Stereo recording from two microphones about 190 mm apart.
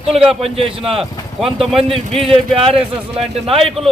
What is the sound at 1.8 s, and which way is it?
A man's voice, 30° right (ahead or behind).